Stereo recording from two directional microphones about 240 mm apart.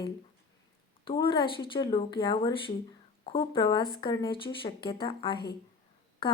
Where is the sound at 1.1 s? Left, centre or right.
Left.